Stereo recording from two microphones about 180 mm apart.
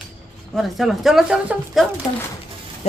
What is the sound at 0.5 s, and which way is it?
Speech, centre (ahead or behind).